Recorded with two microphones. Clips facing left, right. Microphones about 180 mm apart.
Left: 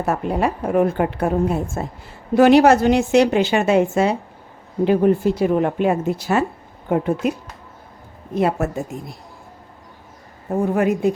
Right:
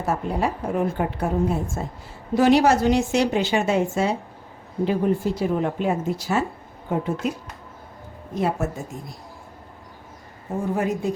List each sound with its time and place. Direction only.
0.0 s a woman's voice: 65° left (ahead or behind)
8.4 s a woman's voice: 65° left (ahead or behind)
10.8 s a woman's voice: 65° left (ahead or behind)